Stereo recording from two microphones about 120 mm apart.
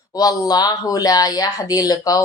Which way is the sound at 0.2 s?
30° left (ahead or behind).